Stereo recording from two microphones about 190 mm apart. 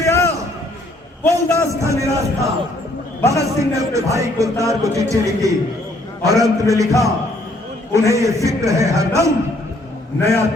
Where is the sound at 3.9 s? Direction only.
15° right (ahead or behind).